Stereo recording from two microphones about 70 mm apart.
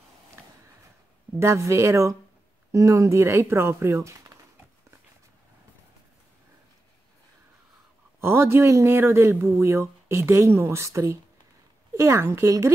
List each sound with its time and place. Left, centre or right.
1.4 s speech: right
8.2 s a man's voice: right